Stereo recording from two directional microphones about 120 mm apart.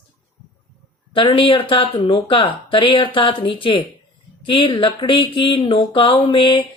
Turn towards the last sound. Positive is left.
turn(degrees=45)  # may be behind; listen again after turning